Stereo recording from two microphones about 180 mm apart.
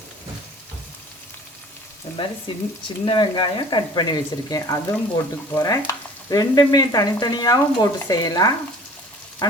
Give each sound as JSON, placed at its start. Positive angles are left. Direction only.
{"t": 2.8, "sound": "speech", "side_deg": 25}